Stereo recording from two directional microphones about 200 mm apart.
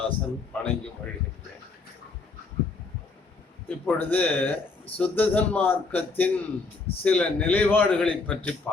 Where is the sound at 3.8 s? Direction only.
10° left (ahead or behind).